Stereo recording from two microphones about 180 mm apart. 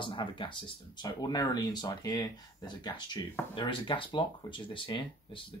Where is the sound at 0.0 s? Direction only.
25° left (ahead or behind).